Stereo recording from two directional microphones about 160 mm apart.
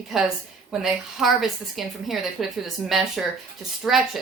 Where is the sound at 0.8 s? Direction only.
Centre (ahead or behind).